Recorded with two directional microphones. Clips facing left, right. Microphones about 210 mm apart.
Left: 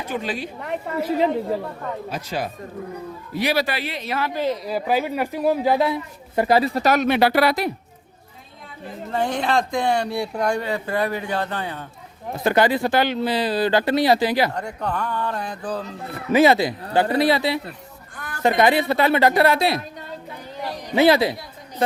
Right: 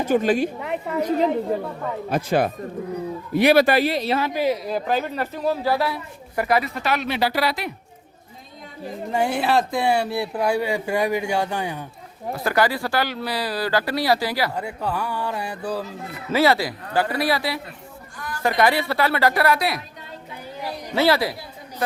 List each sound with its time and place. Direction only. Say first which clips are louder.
0.0 s speech: right 8 dB; 45° right (ahead or behind)
0.6 s a woman's voice: right 1 dB; 5° left (ahead or behind)
2.0 s speech: right 11 dB; 55° right (ahead or behind); by 4.2 s 35° right (ahead or behind)
4.2 s speech: left 3 dB; 10° right (ahead or behind)
4.6 s a woman's voice: left 1 dB; 5° left (ahead or behind); by 7.5 s 60° left (ahead or behind)
9.0 s speech: right 1 dB; 10° right (ahead or behind)
12.4 s a woman's voice: left 3 dB; 20° left (ahead or behind)
14.5 s speech: even; 5° right (ahead or behind)
16.3 s a woman's voice: left 3 dB; 20° left (ahead or behind)
20.9 s a woman's voice: left 4 dB; 20° left (ahead or behind)